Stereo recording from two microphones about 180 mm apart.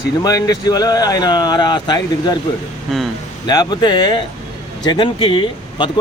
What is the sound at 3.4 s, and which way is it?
Speech, 25° left (ahead or behind).